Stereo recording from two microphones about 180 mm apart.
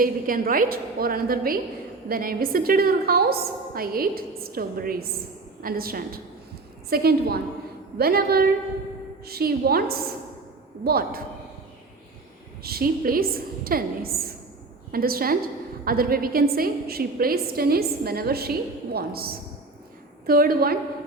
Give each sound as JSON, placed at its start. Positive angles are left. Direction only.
{"t": 0.0, "sound": "a woman's voice", "side_deg": -50}
{"t": 12.6, "sound": "a woman's voice", "side_deg": -55}